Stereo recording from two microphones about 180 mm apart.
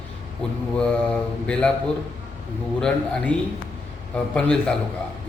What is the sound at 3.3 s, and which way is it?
Speech, 5° left (ahead or behind).